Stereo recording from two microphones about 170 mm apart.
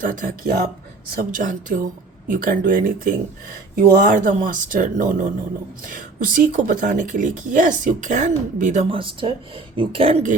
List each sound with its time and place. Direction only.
0.0 s speech: 55° right (ahead or behind); by 10.3 s 35° right (ahead or behind)